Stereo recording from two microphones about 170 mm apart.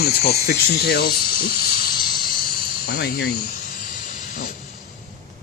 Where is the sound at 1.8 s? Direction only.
60° left (ahead or behind).